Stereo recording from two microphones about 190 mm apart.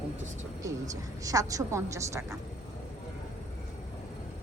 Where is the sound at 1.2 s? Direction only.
20° right (ahead or behind).